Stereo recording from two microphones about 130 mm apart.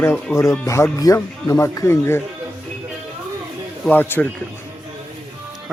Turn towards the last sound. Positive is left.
turn(degrees=15)  # may be behind; listen again after turning